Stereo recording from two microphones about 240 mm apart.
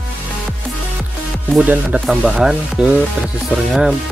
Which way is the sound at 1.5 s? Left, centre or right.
Centre.